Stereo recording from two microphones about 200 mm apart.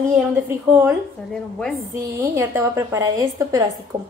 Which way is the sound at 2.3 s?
10° right (ahead or behind).